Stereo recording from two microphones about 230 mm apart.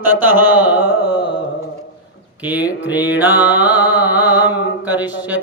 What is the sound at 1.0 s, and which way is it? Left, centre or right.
Carnatic music, left.